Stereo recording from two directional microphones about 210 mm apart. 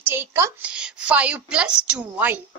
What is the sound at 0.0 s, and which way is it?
A woman's voice, 10° right (ahead or behind).